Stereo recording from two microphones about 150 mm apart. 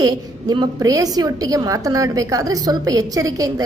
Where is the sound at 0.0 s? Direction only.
25° right (ahead or behind).